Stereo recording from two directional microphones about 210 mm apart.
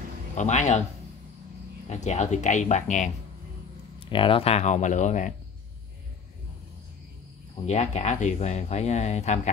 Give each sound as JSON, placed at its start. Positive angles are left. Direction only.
{"t": 0.4, "sound": "speech", "side_deg": 35}
{"t": 1.9, "sound": "speech", "side_deg": 35}
{"t": 4.0, "sound": "speech", "side_deg": 25}
{"t": 7.5, "sound": "speech", "side_deg": 30}